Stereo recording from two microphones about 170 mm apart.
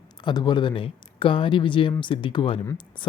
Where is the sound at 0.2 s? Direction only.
25° left (ahead or behind).